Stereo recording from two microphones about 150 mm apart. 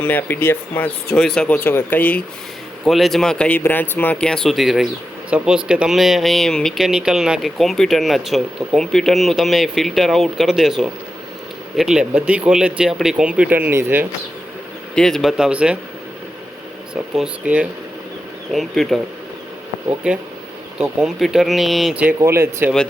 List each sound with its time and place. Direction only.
0.0 s speech: 10° left (ahead or behind); by 14.1 s 15° right (ahead or behind)
14.9 s speech: 5° left (ahead or behind)
16.9 s speech: 5° right (ahead or behind)
20.7 s speech: centre (ahead or behind)
22.2 s speech: 20° right (ahead or behind)